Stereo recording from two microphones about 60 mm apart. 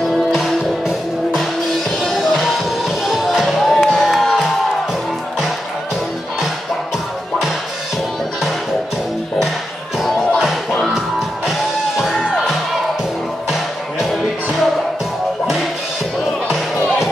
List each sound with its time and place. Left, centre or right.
0.3 s music: centre
10.3 s music: centre
12.2 s music: centre
13.5 s music: centre
15.4 s music: centre